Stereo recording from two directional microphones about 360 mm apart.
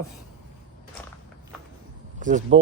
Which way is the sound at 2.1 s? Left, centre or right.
Right.